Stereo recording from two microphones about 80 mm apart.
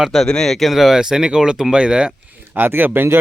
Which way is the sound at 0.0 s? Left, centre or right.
Centre.